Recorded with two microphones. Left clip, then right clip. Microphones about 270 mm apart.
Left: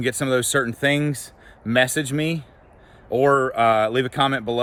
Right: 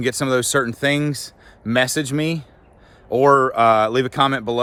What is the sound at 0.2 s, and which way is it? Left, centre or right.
Speech, centre.